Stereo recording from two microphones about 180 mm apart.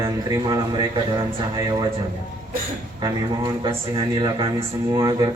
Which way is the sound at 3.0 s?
25° right (ahead or behind).